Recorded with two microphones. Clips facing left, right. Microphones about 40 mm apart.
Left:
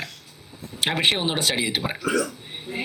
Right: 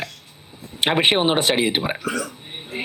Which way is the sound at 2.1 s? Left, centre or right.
Centre.